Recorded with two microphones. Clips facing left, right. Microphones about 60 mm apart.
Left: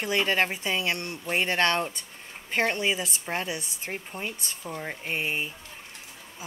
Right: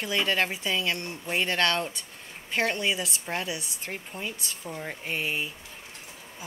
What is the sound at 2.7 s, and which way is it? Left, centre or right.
Speech, centre.